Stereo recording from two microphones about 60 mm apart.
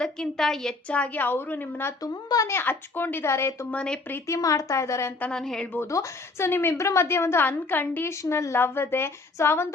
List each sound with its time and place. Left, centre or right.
0.0 s a woman's voice: centre
0.9 s a woman's voice: left
2.0 s speech: left
2.5 s a woman's voice: left
3.2 s a woman's voice: left
4.3 s a woman's voice: left
5.3 s a woman's voice: centre
5.9 s a woman's voice: left
6.7 s a woman's voice: left
7.4 s a woman's voice: left
8.0 s a woman's voice: left
8.5 s a woman's voice: left